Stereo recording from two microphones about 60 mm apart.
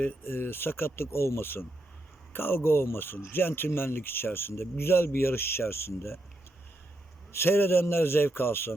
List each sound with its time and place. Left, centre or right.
0.3 s speech: left
7.3 s speech: left